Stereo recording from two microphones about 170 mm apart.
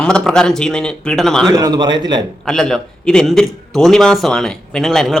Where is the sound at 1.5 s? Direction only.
20° right (ahead or behind).